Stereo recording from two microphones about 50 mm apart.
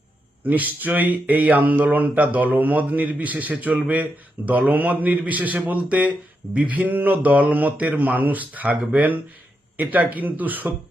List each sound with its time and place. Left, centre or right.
0.4 s speech: right